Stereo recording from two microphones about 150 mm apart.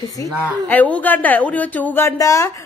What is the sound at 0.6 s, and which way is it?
A woman's voice, 10° left (ahead or behind).